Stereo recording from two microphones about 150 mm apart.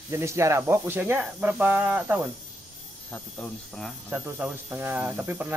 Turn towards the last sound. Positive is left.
turn(degrees=-10)  # may be behind; listen again after turning